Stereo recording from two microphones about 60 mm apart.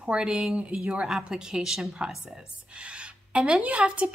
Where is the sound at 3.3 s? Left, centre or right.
Centre.